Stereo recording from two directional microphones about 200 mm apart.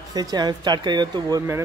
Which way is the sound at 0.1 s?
20° right (ahead or behind).